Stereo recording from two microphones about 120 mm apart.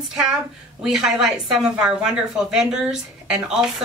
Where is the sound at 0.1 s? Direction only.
5° right (ahead or behind).